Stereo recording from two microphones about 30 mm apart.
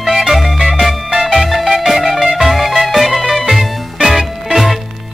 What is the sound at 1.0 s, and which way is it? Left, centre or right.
Music, right.